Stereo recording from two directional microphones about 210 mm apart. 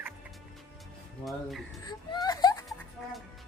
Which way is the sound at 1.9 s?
20° left (ahead or behind).